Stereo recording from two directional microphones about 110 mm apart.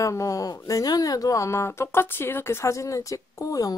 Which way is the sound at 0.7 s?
35° left (ahead or behind).